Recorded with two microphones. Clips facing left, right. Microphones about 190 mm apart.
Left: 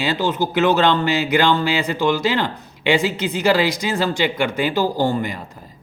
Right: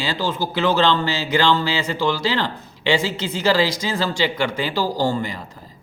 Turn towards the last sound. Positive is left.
turn(degrees=15)  # may be behind; listen again after turning